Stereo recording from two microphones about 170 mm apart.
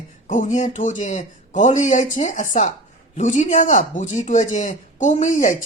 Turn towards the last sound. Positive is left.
turn(degrees=45)  # may be behind; listen again after turning